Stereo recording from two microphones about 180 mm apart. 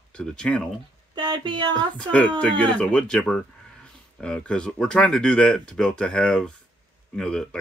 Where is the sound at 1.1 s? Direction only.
25° right (ahead or behind).